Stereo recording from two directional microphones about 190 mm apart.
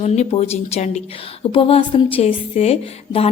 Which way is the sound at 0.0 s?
35° left (ahead or behind).